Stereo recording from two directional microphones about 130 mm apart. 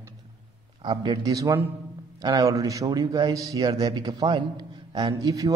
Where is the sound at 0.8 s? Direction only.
35° right (ahead or behind).